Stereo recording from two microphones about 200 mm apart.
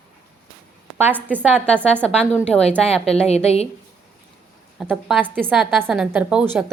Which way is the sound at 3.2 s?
30° left (ahead or behind).